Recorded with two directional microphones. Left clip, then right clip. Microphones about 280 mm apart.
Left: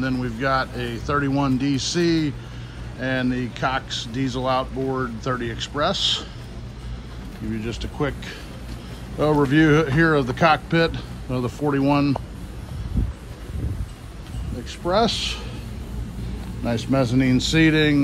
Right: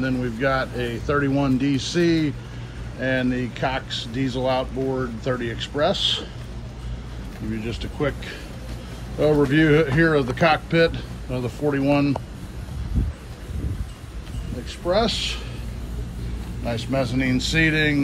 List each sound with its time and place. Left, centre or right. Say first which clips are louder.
0.0 s a man's voice: right 1 dB; centre
7.5 s speech: left 1 dB; centre
14.9 s speech: left 1 dB; centre
16.6 s speech: left 2 dB; left